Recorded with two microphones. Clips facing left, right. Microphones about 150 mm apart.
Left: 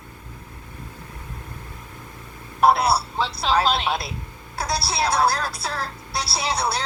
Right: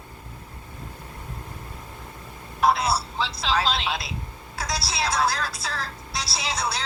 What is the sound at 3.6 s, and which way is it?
Speech, 55° left (ahead or behind).